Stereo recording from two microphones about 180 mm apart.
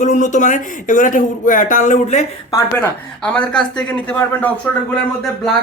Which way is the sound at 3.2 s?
5° left (ahead or behind).